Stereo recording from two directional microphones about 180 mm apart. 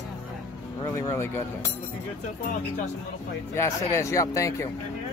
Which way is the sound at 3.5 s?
15° left (ahead or behind).